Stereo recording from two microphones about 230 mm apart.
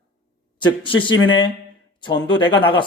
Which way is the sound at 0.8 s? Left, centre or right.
Left.